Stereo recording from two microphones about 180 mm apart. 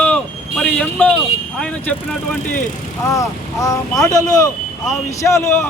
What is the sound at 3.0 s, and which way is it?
A man's voice, 20° left (ahead or behind).